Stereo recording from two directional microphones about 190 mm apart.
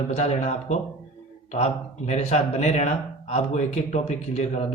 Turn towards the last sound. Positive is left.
turn(degrees=35)  # may be behind; listen again after turning